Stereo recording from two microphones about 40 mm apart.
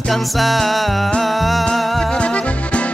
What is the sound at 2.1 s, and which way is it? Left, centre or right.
Music, left.